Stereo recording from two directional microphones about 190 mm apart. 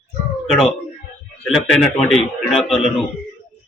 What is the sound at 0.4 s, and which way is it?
Speech, centre (ahead or behind).